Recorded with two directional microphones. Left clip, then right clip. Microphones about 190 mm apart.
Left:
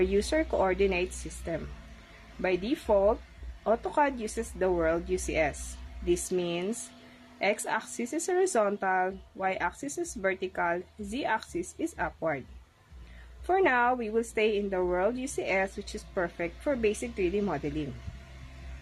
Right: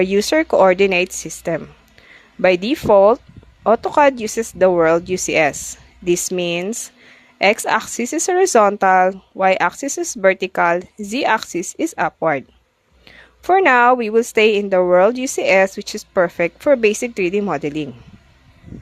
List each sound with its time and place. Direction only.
0.0 s speech: 55° right (ahead or behind)
13.5 s speech: 55° right (ahead or behind)